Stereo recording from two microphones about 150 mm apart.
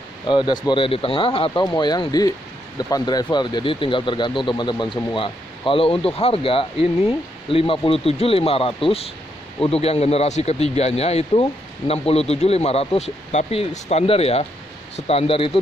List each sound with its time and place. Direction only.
0.3 s speech: 30° left (ahead or behind)